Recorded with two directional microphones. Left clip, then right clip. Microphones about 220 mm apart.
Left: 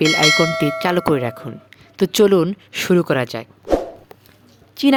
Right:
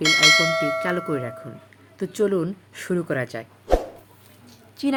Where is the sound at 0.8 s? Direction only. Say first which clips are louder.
Left 7 dB; 45° left (ahead or behind).